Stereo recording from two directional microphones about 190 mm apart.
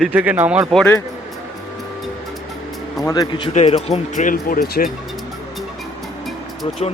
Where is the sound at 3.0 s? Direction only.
20° left (ahead or behind).